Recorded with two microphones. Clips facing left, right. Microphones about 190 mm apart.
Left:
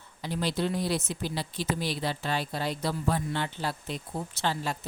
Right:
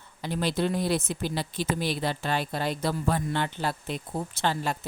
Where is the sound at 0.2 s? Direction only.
55° right (ahead or behind).